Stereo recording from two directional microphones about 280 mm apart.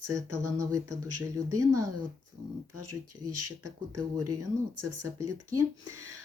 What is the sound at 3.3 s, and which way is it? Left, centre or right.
Speech, right.